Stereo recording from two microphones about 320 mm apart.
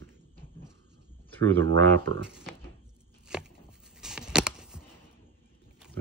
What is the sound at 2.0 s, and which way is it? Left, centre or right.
Speech, right.